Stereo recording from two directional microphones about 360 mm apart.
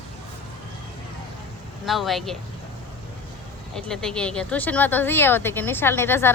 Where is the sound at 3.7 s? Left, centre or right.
Centre.